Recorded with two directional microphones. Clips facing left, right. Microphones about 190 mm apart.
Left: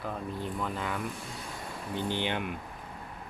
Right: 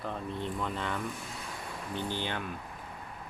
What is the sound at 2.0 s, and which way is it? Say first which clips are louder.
Speech: left 5 dB; 20° left (ahead or behind).